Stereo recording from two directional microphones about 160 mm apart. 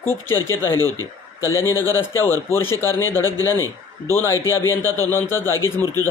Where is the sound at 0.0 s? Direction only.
15° left (ahead or behind).